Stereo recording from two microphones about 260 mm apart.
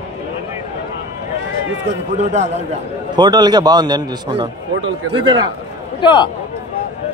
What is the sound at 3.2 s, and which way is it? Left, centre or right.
A man's voice, centre.